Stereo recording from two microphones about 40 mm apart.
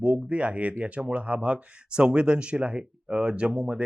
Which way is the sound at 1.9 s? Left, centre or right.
Right.